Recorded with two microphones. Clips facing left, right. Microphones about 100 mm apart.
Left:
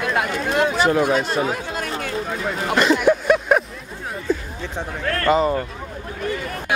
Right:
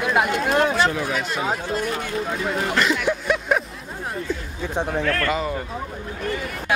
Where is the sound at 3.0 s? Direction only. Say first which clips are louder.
Left 6 dB; 50° left (ahead or behind).